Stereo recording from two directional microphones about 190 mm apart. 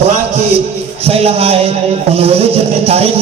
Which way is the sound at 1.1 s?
30° right (ahead or behind).